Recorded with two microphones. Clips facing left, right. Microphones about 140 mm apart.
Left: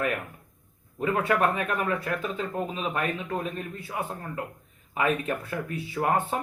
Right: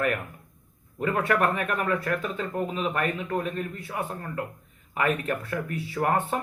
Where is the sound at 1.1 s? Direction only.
15° left (ahead or behind).